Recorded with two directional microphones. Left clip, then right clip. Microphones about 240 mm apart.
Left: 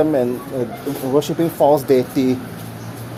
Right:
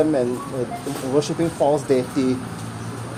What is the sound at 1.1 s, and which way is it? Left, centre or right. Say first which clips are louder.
Speech: left 3 dB; left.